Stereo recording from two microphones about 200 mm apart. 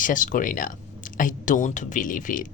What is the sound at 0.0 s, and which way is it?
Speech, 40° left (ahead or behind).